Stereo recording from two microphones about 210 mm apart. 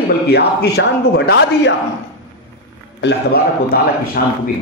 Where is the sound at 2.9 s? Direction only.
50° left (ahead or behind).